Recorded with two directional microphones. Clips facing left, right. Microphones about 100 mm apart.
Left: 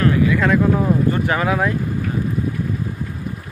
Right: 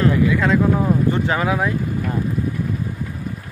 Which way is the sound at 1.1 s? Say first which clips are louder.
Left 1 dB; 20° right (ahead or behind).